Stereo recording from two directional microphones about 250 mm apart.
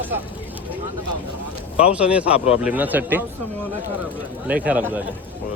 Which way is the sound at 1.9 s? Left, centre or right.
Centre.